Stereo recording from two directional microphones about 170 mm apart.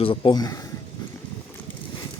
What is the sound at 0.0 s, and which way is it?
Speech, 30° left (ahead or behind).